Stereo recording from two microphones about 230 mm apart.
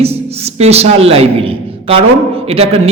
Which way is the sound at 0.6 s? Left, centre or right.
Right.